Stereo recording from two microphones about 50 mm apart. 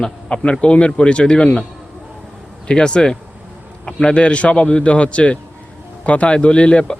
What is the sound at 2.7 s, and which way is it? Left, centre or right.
A man's voice, centre.